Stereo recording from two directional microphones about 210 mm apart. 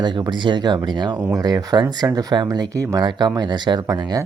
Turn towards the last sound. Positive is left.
turn(degrees=-20)  # may be behind; listen again after turning